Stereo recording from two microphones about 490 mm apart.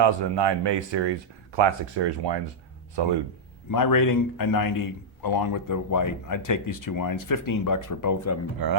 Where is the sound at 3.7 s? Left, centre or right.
Left.